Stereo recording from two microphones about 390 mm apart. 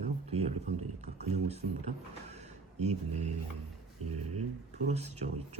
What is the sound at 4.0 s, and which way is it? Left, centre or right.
Speech, right.